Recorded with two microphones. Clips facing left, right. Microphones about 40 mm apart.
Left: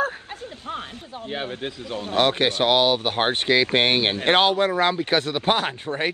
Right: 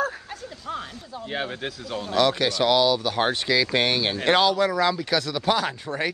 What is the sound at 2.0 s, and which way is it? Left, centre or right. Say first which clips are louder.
Speech: left 1 dB; left.